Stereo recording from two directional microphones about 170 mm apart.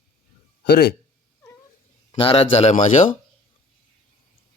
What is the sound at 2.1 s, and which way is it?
A man's voice, 35° left (ahead or behind).